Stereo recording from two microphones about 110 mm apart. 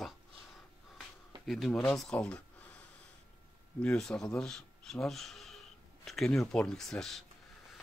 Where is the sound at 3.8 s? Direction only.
5° left (ahead or behind).